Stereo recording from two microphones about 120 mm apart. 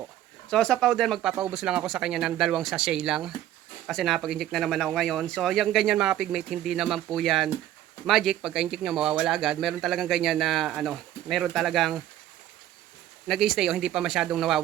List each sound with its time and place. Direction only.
0.5 s speech: 5° left (ahead or behind)
13.2 s speech: centre (ahead or behind)